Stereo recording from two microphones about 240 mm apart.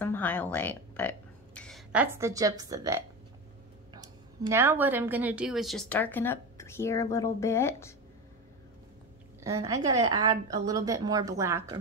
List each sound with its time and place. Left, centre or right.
0.0 s speech: centre
9.4 s a woman's voice: centre